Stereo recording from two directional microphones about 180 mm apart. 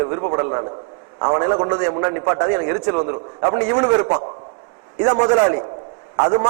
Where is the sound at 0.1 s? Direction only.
25° right (ahead or behind).